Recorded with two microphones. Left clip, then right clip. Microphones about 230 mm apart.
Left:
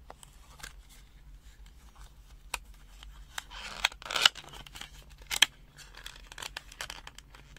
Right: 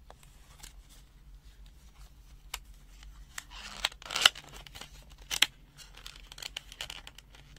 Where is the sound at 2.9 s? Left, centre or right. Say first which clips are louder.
Left 4 dB; centre.